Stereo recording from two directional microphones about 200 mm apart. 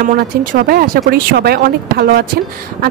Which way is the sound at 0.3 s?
50° right (ahead or behind).